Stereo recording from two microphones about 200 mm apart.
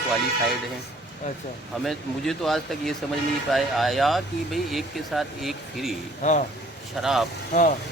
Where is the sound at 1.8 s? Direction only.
Centre (ahead or behind).